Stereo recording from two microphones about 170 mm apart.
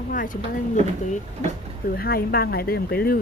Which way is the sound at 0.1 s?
55° left (ahead or behind).